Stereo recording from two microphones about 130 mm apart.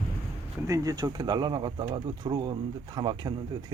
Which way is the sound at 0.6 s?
25° right (ahead or behind).